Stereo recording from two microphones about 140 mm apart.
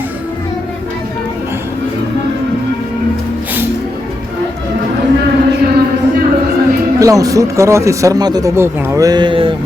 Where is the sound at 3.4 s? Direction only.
15° right (ahead or behind).